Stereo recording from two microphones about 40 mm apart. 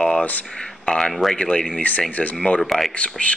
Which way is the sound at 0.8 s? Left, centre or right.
Left.